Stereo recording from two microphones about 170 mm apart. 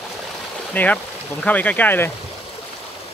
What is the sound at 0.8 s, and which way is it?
Speech, 10° left (ahead or behind).